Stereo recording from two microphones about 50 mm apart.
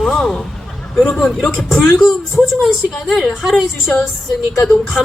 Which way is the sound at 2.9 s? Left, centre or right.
Centre.